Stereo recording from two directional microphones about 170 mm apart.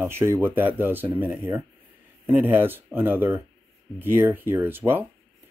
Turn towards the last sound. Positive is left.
turn(degrees=-10)  # may be behind; listen again after turning